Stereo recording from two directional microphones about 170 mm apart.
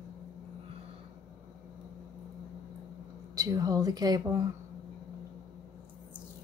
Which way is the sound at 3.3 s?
20° right (ahead or behind).